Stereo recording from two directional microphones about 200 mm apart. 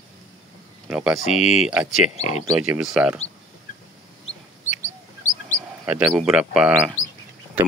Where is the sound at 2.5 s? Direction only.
5° right (ahead or behind).